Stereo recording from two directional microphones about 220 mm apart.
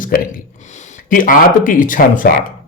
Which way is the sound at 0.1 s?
40° left (ahead or behind).